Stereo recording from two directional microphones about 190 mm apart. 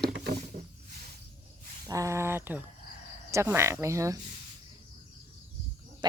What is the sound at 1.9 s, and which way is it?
Speech, 15° right (ahead or behind).